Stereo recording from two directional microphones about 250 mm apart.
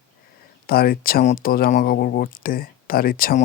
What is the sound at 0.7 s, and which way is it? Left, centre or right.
Speech, left.